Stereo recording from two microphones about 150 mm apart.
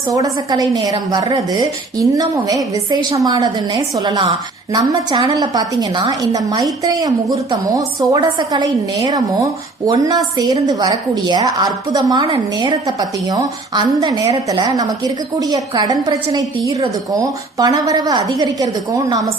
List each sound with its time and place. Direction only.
0.1 s a woman's voice: 25° right (ahead or behind)